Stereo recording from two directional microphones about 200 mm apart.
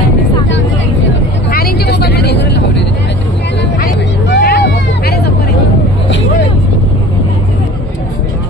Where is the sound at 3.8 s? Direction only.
50° left (ahead or behind).